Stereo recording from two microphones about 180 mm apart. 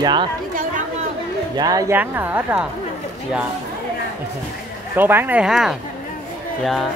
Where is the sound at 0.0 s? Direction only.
25° right (ahead or behind).